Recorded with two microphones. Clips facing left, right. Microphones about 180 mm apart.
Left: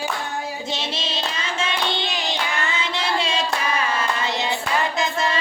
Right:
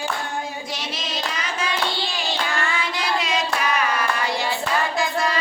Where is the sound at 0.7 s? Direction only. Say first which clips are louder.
Left 2 dB; 25° left (ahead or behind).